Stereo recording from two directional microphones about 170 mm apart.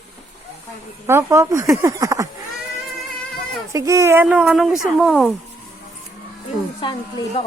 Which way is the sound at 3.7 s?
15° right (ahead or behind).